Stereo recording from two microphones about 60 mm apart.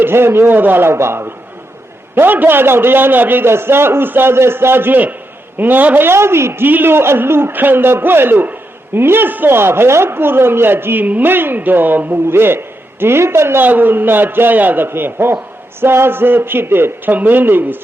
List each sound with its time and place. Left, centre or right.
0.0 s a man's voice: right
2.1 s a man's voice: right
6.1 s a man's voice: right
13.7 s a man's voice: right